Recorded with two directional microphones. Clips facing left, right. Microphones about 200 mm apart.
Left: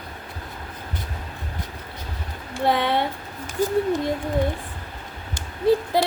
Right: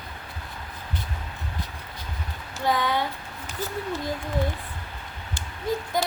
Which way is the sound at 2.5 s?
25° left (ahead or behind).